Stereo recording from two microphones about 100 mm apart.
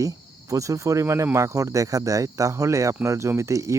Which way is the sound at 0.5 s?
30° right (ahead or behind).